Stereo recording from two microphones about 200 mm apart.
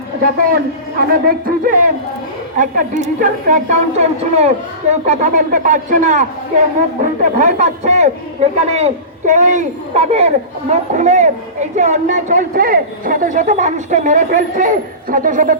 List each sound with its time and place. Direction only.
0.9 s a man's voice: 45° right (ahead or behind)